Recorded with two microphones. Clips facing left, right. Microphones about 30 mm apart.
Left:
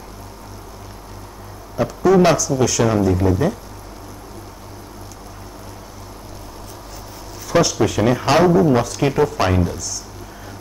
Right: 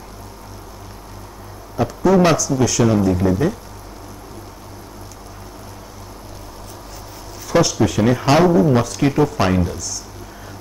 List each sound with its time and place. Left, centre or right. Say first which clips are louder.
1.8 s speech: left 1 dB; centre
7.4 s speech: even; centre
9.0 s speech: right 1 dB; centre